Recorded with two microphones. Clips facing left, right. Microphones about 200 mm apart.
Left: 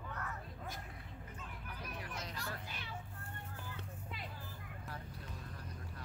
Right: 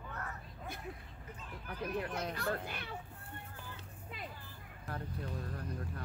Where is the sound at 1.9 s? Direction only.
60° right (ahead or behind).